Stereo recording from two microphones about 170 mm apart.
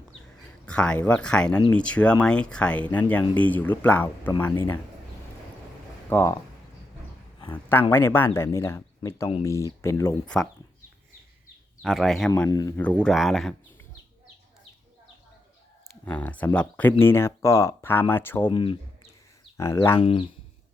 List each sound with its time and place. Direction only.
0.6 s speech: 5° left (ahead or behind)
6.1 s speech: 15° left (ahead or behind)
7.5 s speech: 10° left (ahead or behind)
10.2 s speech: 5° left (ahead or behind)
11.8 s speech: centre (ahead or behind)
12.5 s speech: 20° left (ahead or behind)
12.8 s speech: 5° left (ahead or behind)
16.0 s speech: 10° left (ahead or behind)
18.4 s speech: 30° left (ahead or behind)
19.5 s speech: 15° left (ahead or behind)
20.0 s speech: 30° left (ahead or behind)